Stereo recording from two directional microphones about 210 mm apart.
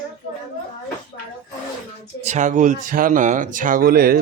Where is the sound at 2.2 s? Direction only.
35° right (ahead or behind).